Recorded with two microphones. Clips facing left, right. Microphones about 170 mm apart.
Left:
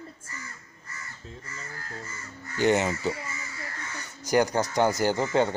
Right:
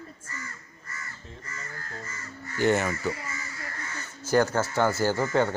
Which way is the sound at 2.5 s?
20° left (ahead or behind).